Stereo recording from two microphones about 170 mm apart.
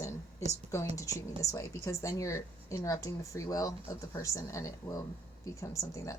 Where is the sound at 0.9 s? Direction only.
20° left (ahead or behind).